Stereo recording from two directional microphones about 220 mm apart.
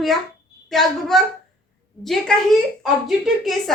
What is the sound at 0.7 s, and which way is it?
A woman's voice, centre (ahead or behind).